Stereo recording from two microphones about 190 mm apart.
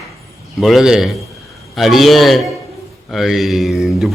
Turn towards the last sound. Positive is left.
turn(degrees=0)  # may be behind; listen again after turning